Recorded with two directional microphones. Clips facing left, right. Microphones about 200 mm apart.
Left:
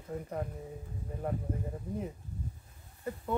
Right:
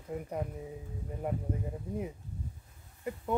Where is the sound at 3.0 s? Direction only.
15° right (ahead or behind).